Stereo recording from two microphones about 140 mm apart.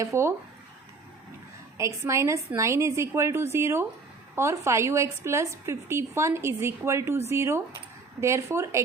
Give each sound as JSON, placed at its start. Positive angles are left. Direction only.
{"t": 0.0, "sound": "a woman's voice", "side_deg": -20}
{"t": 1.8, "sound": "a woman's voice", "side_deg": -20}